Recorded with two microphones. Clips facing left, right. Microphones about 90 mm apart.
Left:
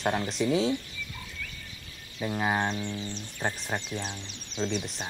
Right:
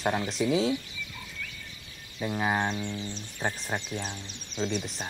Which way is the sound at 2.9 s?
15° right (ahead or behind).